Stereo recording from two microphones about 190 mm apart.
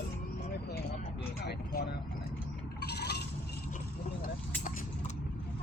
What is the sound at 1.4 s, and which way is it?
Vehicle, 60° left (ahead or behind).